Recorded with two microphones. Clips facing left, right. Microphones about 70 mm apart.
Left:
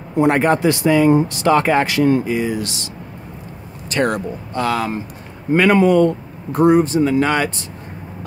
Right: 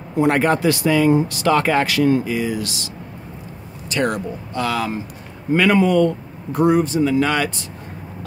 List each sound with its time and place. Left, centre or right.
0.2 s speech: left
3.9 s speech: left